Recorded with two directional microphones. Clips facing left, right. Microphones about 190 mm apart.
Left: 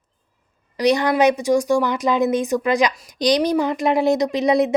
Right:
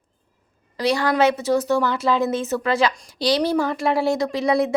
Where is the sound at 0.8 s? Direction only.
20° left (ahead or behind).